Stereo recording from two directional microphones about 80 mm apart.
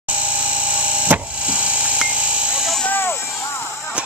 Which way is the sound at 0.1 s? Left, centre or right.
Centre.